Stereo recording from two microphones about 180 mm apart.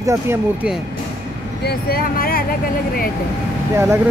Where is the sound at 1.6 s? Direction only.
55° left (ahead or behind).